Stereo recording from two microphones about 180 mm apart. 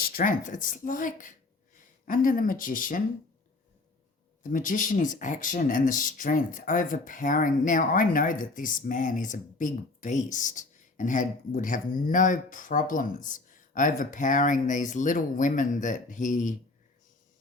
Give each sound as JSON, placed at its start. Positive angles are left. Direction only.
{"t": 0.2, "sound": "speech", "side_deg": 45}
{"t": 4.4, "sound": "speech", "side_deg": 45}